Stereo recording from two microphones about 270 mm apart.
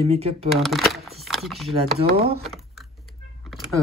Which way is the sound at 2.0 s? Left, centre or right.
Right.